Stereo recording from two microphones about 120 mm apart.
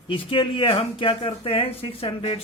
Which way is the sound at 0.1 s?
50° left (ahead or behind).